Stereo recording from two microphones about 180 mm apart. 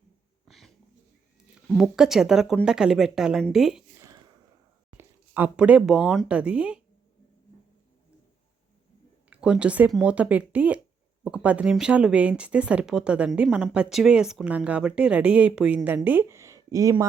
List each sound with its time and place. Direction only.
0.4 s dog: centre (ahead or behind)
1.6 s a woman's voice: centre (ahead or behind)
3.9 s a sound: 15° right (ahead or behind)
4.9 s speech: 10° right (ahead or behind)
9.3 s speech: 5° right (ahead or behind)